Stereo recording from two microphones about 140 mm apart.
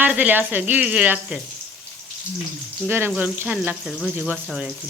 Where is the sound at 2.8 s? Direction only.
15° right (ahead or behind).